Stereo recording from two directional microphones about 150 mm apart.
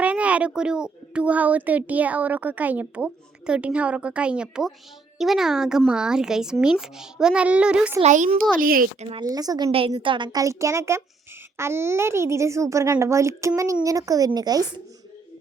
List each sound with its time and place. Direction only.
0.0 s a child's voice: 10° right (ahead or behind)
8.0 s a child's voice: 55° right (ahead or behind)
8.4 s a woman's voice: 70° right (ahead or behind)
9.0 s speech: 40° right (ahead or behind)
9.2 s a child's voice: 25° right (ahead or behind)
9.7 s a child's voice: 40° right (ahead or behind)